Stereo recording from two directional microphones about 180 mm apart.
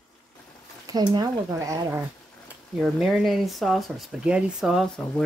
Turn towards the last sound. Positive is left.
turn(degrees=0)  # may be behind; listen again after turning